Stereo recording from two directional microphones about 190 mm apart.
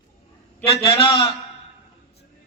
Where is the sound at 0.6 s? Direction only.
30° left (ahead or behind).